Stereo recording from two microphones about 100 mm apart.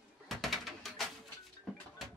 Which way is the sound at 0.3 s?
Centre (ahead or behind).